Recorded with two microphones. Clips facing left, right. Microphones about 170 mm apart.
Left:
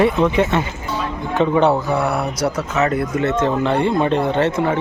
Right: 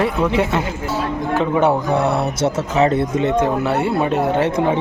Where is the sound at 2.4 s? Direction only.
25° right (ahead or behind).